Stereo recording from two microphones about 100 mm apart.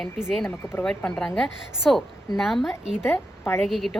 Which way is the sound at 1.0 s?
10° left (ahead or behind).